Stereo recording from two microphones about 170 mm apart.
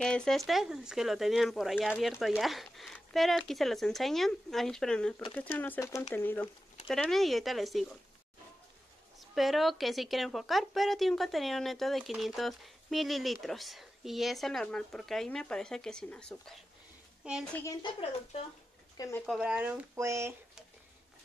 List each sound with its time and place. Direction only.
0.0 s speech: 5° left (ahead or behind)
9.2 s speech: centre (ahead or behind)
18.9 s speech: 15° left (ahead or behind)
19.2 s speech: 5° right (ahead or behind)